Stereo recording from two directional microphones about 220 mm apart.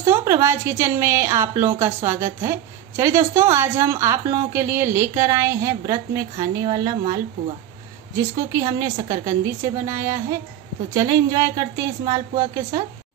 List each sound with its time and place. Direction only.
0.0 s a woman's voice: 10° right (ahead or behind)
8.2 s a woman's voice: 15° right (ahead or behind)